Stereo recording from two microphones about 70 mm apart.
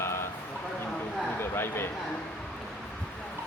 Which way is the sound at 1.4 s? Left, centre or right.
Left.